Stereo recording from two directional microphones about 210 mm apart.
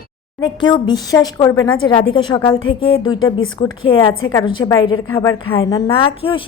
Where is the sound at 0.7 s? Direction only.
20° left (ahead or behind).